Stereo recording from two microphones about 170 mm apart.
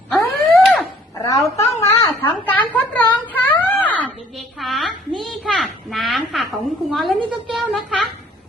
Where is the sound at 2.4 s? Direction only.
10° left (ahead or behind).